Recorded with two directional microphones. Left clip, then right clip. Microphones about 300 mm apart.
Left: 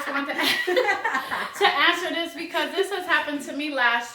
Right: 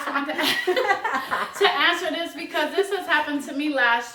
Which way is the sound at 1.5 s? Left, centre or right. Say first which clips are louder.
Even; centre.